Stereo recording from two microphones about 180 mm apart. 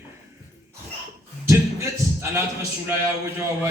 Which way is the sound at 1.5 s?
15° right (ahead or behind).